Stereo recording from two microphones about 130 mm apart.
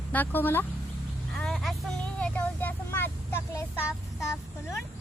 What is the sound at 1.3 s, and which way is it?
Speech, 5° left (ahead or behind).